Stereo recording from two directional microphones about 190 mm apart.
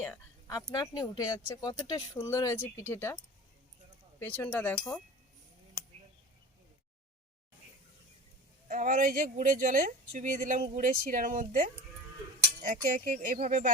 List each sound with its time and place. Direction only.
0.0 s a sound: 15° left (ahead or behind)
0.7 s speech: 20° left (ahead or behind)
4.2 s speech: 10° left (ahead or behind)
8.6 s speech: 45° right (ahead or behind)